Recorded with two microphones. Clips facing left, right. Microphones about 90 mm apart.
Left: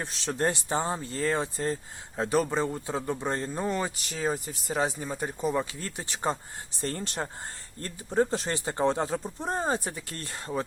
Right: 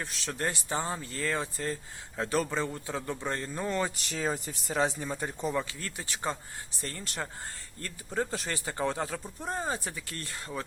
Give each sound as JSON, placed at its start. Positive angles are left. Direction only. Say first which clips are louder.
{"t": 0.0, "sound": "speech", "louder": "left 5 dB", "side_deg": 25}
{"t": 3.8, "sound": "speech", "louder": "left 2 dB", "side_deg": 0}